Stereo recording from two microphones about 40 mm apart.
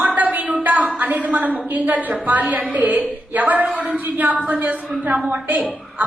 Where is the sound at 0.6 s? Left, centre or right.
Right.